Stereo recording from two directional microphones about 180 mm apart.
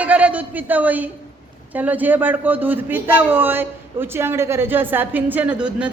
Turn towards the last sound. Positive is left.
turn(degrees=-5)  # may be behind; listen again after turning